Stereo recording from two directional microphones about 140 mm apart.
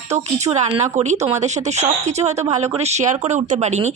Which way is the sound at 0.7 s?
50° right (ahead or behind).